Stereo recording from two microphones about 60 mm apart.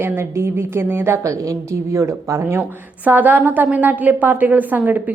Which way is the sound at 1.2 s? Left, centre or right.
Right.